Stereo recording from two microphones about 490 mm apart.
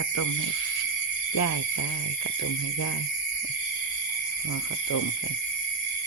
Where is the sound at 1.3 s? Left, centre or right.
Left.